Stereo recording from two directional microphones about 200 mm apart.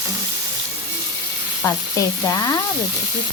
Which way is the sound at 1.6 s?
15° left (ahead or behind).